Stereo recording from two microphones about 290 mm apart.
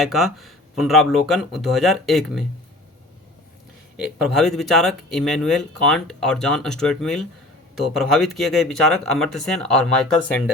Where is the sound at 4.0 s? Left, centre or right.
Centre.